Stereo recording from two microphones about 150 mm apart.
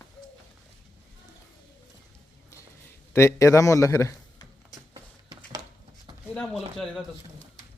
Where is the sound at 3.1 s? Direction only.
20° left (ahead or behind).